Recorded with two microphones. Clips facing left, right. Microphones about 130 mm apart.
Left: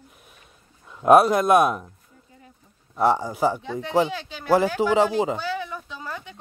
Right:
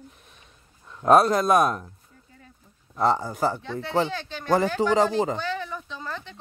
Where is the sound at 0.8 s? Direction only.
10° left (ahead or behind).